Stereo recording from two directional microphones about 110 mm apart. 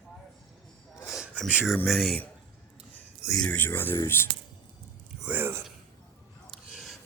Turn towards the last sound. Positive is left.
turn(degrees=0)  # may be behind; listen again after turning